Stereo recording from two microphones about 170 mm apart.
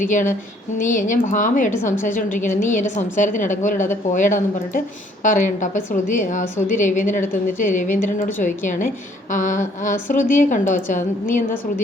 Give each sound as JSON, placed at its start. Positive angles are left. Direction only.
{"t": 0.0, "sound": "a woman's voice", "side_deg": 50}